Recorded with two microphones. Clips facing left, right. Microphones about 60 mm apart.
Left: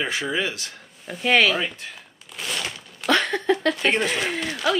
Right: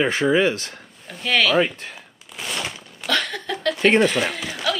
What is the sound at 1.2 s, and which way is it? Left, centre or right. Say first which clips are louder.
Speech: left 2 dB; left.